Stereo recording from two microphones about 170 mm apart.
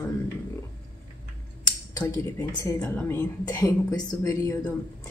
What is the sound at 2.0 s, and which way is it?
A woman's voice, 15° left (ahead or behind).